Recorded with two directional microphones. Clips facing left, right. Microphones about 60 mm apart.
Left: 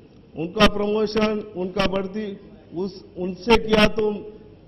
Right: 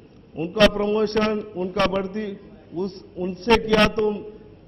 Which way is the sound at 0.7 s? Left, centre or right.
Right.